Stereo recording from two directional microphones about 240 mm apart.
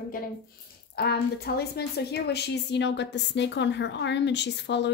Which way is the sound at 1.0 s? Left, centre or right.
Left.